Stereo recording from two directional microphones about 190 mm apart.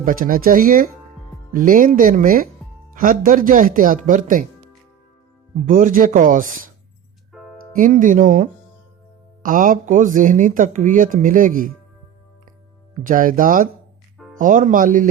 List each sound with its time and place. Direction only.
0.0 s speech: 45° right (ahead or behind)
5.6 s speech: 45° right (ahead or behind)
7.8 s speech: 45° right (ahead or behind)
13.0 s speech: 45° right (ahead or behind)